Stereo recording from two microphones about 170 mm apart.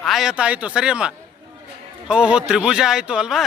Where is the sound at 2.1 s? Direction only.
5° right (ahead or behind).